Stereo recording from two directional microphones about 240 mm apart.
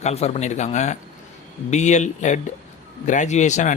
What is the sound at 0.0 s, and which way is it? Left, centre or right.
A man's voice, left.